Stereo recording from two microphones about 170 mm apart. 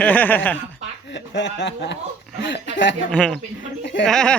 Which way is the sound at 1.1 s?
90° left.